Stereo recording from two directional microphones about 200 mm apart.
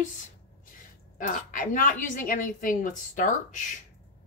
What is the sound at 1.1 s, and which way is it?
A woman's voice, 40° left (ahead or behind).